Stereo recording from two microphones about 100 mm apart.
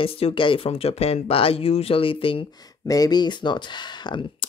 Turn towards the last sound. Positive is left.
turn(degrees=50)  # may be behind; listen again after turning